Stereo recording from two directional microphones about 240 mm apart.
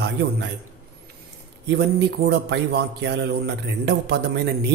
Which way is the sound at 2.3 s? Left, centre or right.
Right.